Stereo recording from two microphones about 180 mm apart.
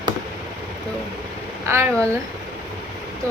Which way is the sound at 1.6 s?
15° right (ahead or behind).